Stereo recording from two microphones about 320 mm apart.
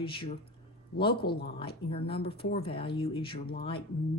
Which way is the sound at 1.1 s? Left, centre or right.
Left.